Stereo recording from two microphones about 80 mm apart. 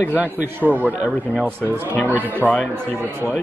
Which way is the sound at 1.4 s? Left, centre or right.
Right.